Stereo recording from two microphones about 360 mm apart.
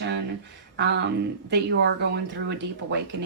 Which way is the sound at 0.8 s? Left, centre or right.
Right.